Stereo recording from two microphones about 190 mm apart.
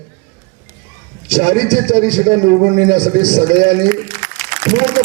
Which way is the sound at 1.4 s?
25° right (ahead or behind).